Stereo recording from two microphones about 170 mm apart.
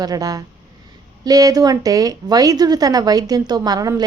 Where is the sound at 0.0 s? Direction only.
20° right (ahead or behind).